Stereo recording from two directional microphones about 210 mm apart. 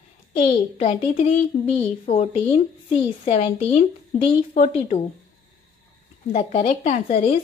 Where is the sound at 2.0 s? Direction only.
35° left (ahead or behind).